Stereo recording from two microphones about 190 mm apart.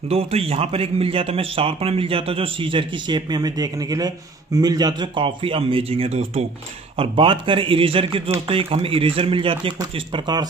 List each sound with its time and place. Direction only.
0.1 s a man's voice: 30° right (ahead or behind)